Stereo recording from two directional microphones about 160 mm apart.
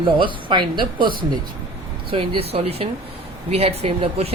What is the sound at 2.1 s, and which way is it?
Speech, 35° right (ahead or behind).